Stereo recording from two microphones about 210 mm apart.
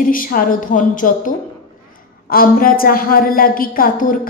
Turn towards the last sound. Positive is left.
turn(degrees=40)  # may be behind; listen again after turning